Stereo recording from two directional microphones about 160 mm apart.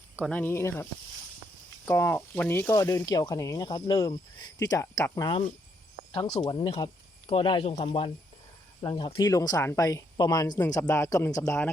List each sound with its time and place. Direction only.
0.2 s speech: 10° left (ahead or behind)